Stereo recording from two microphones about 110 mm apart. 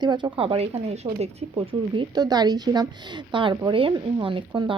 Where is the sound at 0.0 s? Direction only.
45° right (ahead or behind).